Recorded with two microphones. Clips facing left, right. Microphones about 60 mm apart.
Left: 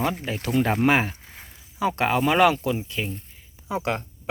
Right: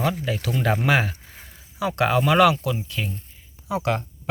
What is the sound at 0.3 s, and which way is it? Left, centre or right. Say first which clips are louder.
Speech: even; left.